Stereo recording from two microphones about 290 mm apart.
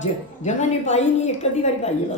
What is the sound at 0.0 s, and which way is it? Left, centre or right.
A woman's voice, left.